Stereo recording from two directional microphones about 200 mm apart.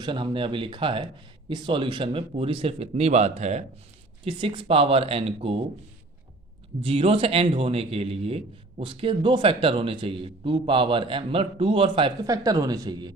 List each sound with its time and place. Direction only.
0.0 s a man's voice: 25° right (ahead or behind)
6.8 s a man's voice: 30° right (ahead or behind)